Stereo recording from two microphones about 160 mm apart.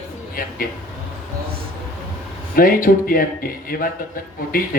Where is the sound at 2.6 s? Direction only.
60° left (ahead or behind).